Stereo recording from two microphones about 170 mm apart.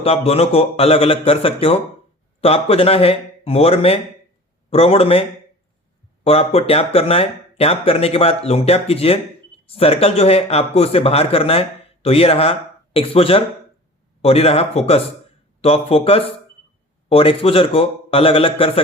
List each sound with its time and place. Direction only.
0.0 s speech: 35° left (ahead or behind)
6.2 s speech: 35° left (ahead or behind)